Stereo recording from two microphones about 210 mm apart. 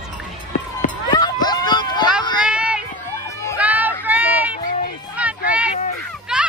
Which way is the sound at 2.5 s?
5° right (ahead or behind).